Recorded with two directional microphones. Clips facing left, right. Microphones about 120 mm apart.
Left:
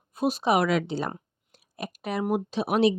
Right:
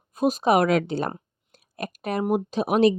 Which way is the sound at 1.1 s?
45° right (ahead or behind).